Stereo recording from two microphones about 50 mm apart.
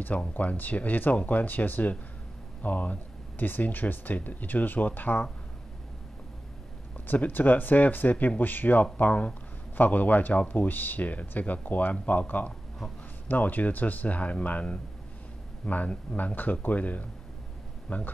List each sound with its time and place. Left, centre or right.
0.0 s speech: left
7.1 s speech: left